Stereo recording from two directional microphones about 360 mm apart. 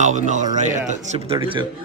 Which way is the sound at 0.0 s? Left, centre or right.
Centre.